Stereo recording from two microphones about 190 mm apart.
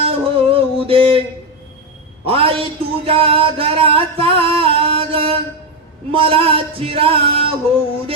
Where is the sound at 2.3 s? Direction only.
30° right (ahead or behind).